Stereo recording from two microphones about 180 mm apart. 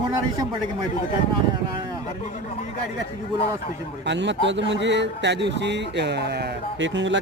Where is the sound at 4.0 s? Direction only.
75° right (ahead or behind).